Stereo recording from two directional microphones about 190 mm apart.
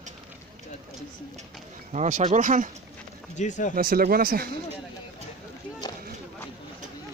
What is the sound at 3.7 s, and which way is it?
Speech, 50° right (ahead or behind).